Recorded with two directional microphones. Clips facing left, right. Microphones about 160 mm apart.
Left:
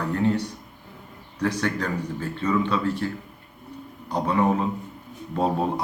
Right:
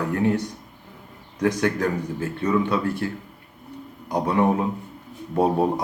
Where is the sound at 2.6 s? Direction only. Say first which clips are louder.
Right 1 dB; 15° right (ahead or behind).